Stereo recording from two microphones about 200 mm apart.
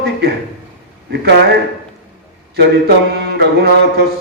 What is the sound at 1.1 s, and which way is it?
Speech, 55° right (ahead or behind).